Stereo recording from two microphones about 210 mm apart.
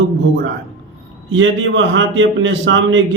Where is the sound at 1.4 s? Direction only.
65° right (ahead or behind).